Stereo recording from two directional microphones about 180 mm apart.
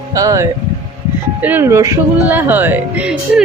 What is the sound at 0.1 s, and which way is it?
Speech, 20° right (ahead or behind).